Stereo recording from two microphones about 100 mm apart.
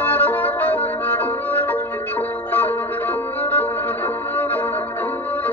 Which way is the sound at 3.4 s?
15° left (ahead or behind).